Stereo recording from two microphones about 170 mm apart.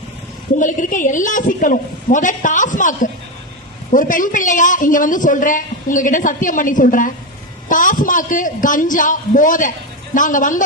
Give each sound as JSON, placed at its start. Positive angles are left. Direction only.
{"t": 0.6, "sound": "a woman's voice", "side_deg": 50}